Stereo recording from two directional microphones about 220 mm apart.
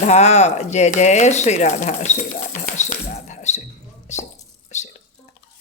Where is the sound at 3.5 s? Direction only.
30° left (ahead or behind).